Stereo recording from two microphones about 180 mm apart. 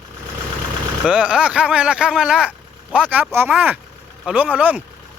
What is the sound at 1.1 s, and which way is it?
Speech, 5° right (ahead or behind).